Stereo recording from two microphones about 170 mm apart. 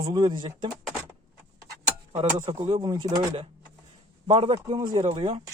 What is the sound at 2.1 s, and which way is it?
Speech, 40° right (ahead or behind).